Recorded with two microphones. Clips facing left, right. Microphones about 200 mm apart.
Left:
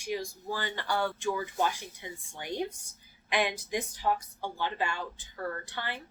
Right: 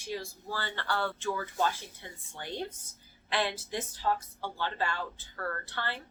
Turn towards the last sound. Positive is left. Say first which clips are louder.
# even
turn(degrees=15)  # may be behind; listen again after turning